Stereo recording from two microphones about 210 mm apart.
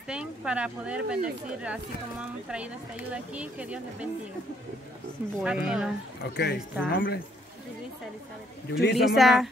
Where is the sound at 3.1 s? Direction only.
5° right (ahead or behind).